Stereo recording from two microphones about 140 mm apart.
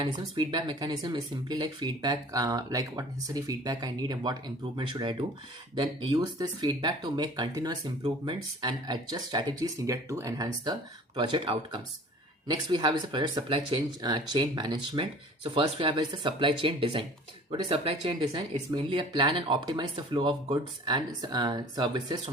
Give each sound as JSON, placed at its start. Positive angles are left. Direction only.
{"t": 0.1, "sound": "speech", "side_deg": -35}
{"t": 18.0, "sound": "speech", "side_deg": -30}